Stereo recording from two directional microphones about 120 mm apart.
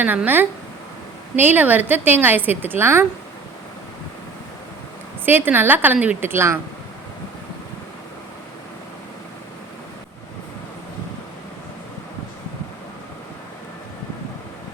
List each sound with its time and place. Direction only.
0.0 s a woman's voice: 15° right (ahead or behind)
5.2 s a woman's voice: 15° right (ahead or behind)